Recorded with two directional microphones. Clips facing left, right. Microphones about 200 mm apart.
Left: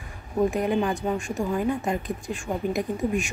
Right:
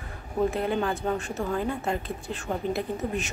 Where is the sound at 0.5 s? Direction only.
15° left (ahead or behind).